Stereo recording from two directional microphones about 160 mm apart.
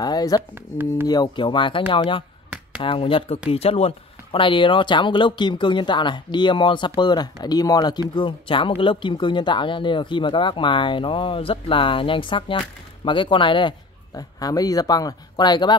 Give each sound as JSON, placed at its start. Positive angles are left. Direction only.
{"t": 0.0, "sound": "speech", "side_deg": 25}